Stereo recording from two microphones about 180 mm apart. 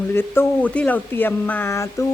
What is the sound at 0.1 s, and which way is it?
Speech, 10° left (ahead or behind).